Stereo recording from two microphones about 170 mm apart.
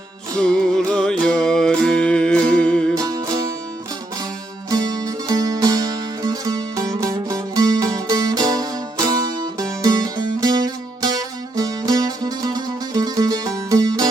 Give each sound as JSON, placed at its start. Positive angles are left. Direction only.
{"t": 0.3, "sound": "music", "side_deg": 5}
{"t": 3.0, "sound": "music", "side_deg": -20}
{"t": 4.7, "sound": "music", "side_deg": -20}